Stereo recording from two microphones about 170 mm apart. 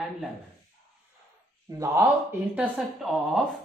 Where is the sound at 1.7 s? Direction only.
20° right (ahead or behind).